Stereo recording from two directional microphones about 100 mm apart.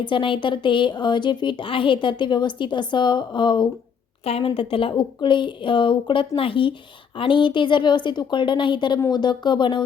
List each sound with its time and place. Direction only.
0.0 s a woman's voice: 55° left (ahead or behind)
4.3 s a woman's voice: 65° left (ahead or behind)